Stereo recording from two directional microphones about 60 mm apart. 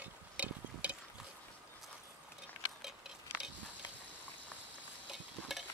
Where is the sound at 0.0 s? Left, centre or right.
Right.